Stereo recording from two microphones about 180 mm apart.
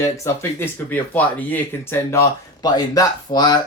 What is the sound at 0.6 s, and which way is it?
Speech, 10° left (ahead or behind).